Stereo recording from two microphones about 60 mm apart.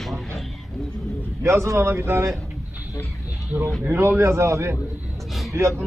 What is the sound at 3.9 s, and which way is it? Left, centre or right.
A man's voice, right.